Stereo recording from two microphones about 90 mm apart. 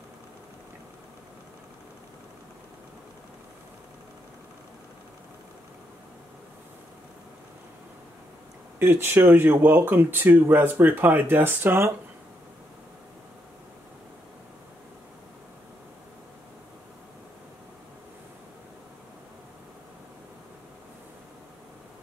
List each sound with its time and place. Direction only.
8.7 s speech: 25° right (ahead or behind)